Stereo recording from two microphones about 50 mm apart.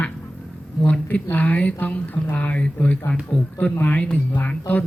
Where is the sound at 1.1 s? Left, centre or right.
Left.